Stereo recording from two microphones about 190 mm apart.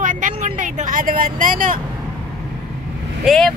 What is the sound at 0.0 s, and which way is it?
Vehicle, 40° right (ahead or behind).